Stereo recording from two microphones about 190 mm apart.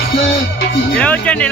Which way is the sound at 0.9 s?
5° left (ahead or behind).